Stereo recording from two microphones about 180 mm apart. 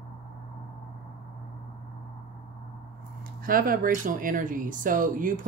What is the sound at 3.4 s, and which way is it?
Speech, 50° right (ahead or behind).